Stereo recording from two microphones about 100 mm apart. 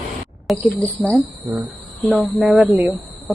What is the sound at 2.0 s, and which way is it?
Speech, 5° right (ahead or behind).